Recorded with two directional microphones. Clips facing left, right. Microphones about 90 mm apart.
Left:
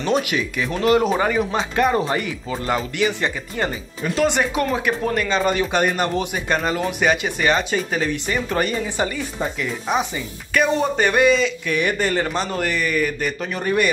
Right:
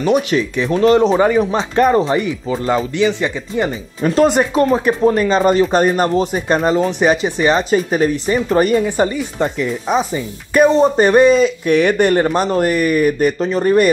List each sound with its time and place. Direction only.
0.3 s speech: 30° right (ahead or behind)
4.0 s speech: 40° right (ahead or behind)
5.0 s speech: 25° right (ahead or behind)
5.3 s speech: 40° right (ahead or behind)
8.6 s a man's voice: 50° right (ahead or behind)
9.4 s speech: 80° right
9.9 s speech: 35° right (ahead or behind)
11.7 s speech: 75° right (ahead or behind)
12.1 s a man's voice: 45° right (ahead or behind)
13.4 s speech: 30° right (ahead or behind)